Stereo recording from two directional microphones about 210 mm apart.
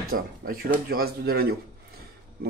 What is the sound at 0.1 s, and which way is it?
Speech, 45° right (ahead or behind).